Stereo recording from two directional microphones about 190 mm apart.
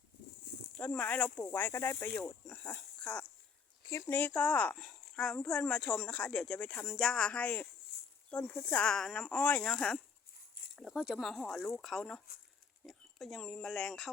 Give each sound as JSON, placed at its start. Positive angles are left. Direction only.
{"t": 0.8, "sound": "speech", "side_deg": 10}
{"t": 2.4, "sound": "a sound", "side_deg": 5}
{"t": 4.1, "sound": "speech", "side_deg": 5}
{"t": 7.9, "sound": "snake", "side_deg": 60}
{"t": 8.3, "sound": "speech", "side_deg": 5}